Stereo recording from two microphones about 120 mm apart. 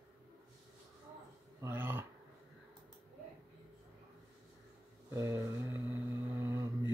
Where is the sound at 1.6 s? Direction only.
20° right (ahead or behind).